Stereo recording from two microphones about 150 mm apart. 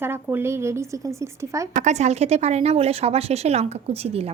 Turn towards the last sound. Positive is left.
turn(degrees=-40)  # may be behind; listen again after turning